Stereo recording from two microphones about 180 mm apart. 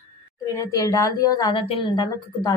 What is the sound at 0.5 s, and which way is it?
A woman's voice, 20° left (ahead or behind).